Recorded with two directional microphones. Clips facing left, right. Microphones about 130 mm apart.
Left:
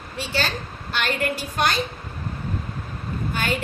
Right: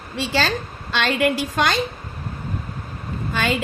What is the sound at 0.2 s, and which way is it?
A woman's voice, 90° right.